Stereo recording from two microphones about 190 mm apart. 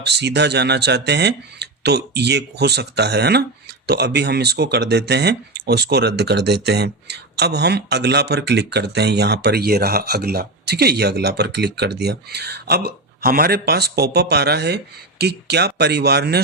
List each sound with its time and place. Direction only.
0.0 s speech: 60° right (ahead or behind)